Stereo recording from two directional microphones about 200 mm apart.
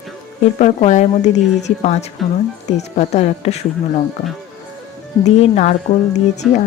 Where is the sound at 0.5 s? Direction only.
35° left (ahead or behind).